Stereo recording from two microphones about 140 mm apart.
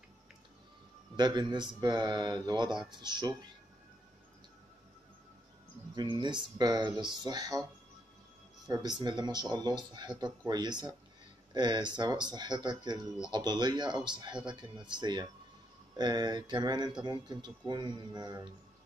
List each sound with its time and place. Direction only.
1.1 s speech: 30° right (ahead or behind)
5.9 s speech: 30° right (ahead or behind)
8.6 s speech: 30° right (ahead or behind)